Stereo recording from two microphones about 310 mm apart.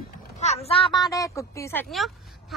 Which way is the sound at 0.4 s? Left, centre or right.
Centre.